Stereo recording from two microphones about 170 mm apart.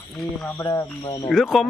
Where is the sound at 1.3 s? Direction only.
Centre (ahead or behind).